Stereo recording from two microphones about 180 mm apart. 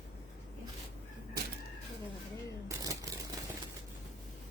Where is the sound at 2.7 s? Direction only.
20° right (ahead or behind).